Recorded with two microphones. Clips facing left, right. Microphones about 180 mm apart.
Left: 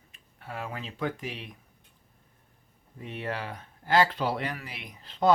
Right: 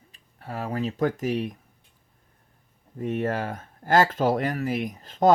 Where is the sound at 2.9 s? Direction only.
45° right (ahead or behind).